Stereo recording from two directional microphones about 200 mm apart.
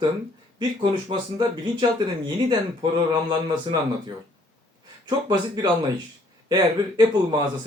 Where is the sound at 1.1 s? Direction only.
20° right (ahead or behind).